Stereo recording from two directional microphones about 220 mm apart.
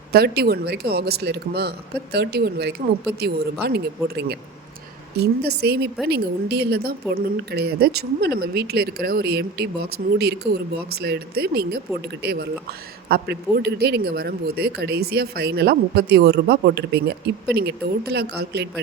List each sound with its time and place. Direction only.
0.1 s speech: 45° right (ahead or behind)